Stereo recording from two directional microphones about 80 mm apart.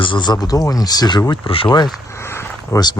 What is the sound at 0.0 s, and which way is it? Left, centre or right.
Speech, left.